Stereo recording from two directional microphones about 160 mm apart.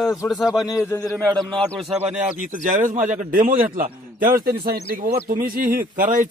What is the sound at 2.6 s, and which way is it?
Speech, 55° right (ahead or behind).